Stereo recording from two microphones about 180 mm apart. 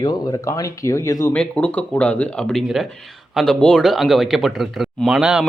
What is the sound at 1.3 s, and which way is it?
Speech, 5° left (ahead or behind).